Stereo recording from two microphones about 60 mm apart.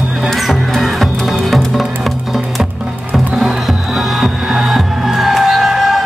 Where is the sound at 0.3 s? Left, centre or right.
Centre.